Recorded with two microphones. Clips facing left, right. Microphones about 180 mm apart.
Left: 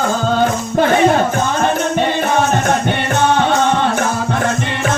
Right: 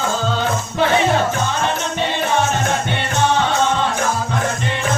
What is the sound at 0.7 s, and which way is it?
Music, 50° left (ahead or behind).